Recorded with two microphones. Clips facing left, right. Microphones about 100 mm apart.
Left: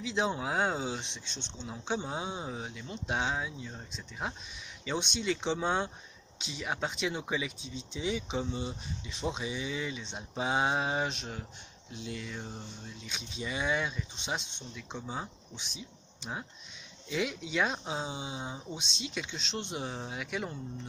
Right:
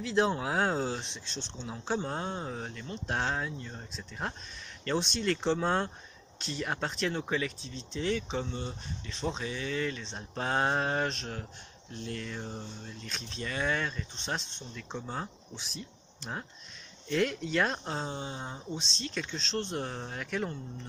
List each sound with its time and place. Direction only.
0.0 s speech: centre (ahead or behind)